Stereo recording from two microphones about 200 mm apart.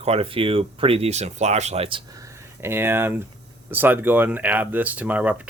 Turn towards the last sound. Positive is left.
turn(degrees=-5)  # may be behind; listen again after turning